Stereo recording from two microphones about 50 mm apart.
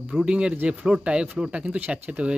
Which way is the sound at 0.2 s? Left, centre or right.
Centre.